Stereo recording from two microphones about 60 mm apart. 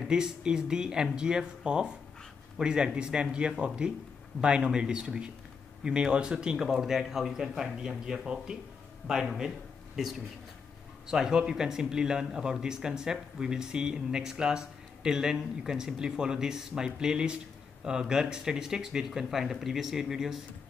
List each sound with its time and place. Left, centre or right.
0.0 s a man's voice: centre